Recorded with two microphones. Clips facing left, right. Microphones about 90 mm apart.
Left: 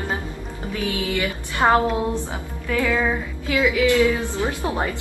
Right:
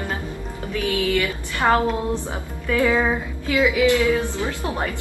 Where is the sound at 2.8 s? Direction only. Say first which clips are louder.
Right 2 dB; 20° right (ahead or behind).